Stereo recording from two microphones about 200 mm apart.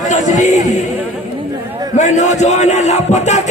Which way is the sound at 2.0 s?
35° left (ahead or behind).